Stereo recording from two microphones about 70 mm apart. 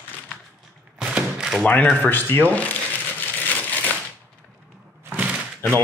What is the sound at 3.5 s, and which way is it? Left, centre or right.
Crushing, left.